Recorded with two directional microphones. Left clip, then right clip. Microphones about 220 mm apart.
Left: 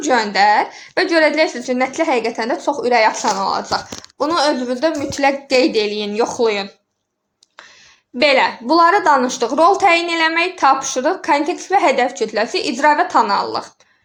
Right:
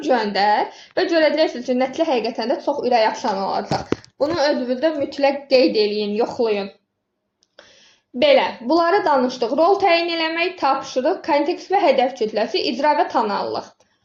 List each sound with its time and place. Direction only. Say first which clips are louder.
0.1 s a woman's voice: left 4 dB; 25° left (ahead or behind)
8.2 s a woman's voice: left 2 dB; 20° left (ahead or behind)